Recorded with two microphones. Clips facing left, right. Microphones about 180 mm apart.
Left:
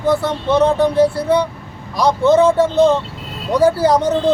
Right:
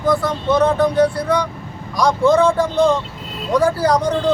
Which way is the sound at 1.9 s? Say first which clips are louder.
Left 2 dB; 25° left (ahead or behind).